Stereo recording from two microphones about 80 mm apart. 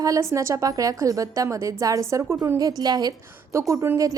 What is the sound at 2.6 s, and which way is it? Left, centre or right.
Speech, right.